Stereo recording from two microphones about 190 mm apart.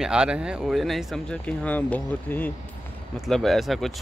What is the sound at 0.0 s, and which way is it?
Speech, 5° right (ahead or behind).